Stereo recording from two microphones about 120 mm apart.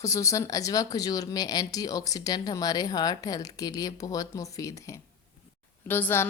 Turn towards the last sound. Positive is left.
turn(degrees=15)  # may be behind; listen again after turning